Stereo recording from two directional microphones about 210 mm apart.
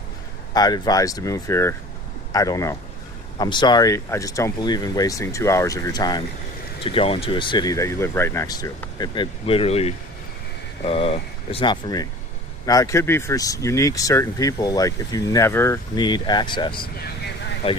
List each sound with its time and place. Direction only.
0.5 s speech: 20° left (ahead or behind)